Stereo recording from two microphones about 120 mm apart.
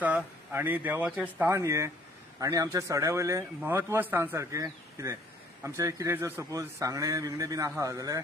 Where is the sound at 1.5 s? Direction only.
25° right (ahead or behind).